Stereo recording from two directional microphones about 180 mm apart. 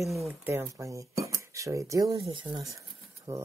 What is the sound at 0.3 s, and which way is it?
Speech, 10° right (ahead or behind).